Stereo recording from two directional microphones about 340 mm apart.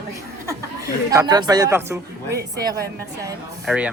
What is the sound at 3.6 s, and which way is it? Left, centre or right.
Speech, centre.